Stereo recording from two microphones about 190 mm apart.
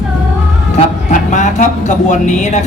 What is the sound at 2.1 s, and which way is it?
Speech, 40° left (ahead or behind).